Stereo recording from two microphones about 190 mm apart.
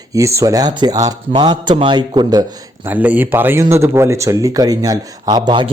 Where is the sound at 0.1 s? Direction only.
15° right (ahead or behind).